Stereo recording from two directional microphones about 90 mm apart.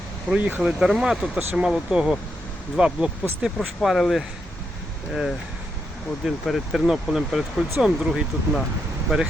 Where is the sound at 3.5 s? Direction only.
Centre (ahead or behind).